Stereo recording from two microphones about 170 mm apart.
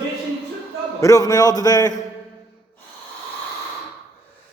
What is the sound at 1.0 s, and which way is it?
A man's voice, 20° left (ahead or behind).